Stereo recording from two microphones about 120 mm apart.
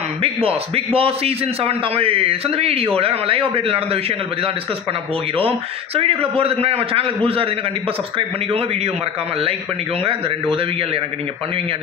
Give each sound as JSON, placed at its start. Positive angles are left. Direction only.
{"t": 0.2, "sound": "a man's voice", "side_deg": -50}
{"t": 5.4, "sound": "a man's voice", "side_deg": -50}
{"t": 10.0, "sound": "a man's voice", "side_deg": -50}